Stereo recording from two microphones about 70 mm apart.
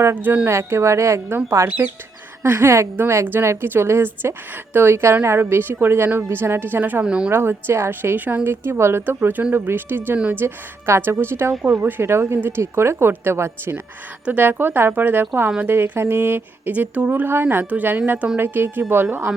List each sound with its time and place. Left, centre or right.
0.0 s a woman's voice: right
7.0 s speech: centre
7.3 s a woman's voice: right
14.3 s a woman's voice: right
16.7 s a woman's voice: right